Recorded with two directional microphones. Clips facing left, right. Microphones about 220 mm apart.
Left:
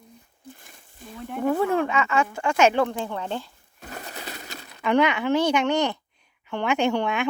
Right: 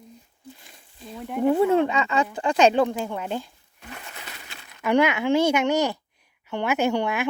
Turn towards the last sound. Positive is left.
turn(degrees=-5)  # may be behind; listen again after turning